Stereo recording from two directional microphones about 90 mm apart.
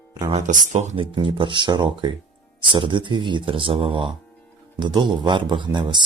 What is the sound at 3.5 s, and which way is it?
Speech, 80° right.